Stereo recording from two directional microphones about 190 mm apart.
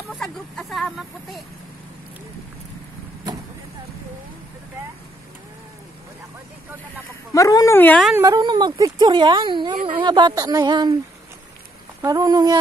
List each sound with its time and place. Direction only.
0.1 s speech: centre (ahead or behind)
7.3 s speech: 15° left (ahead or behind)
8.2 s speech: 20° right (ahead or behind)
12.0 s speech: 20° right (ahead or behind)